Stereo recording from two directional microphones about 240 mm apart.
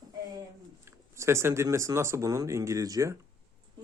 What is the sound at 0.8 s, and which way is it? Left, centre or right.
Speech, centre.